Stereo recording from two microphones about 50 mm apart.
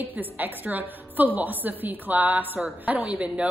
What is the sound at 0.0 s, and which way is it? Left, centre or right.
A man's voice, right.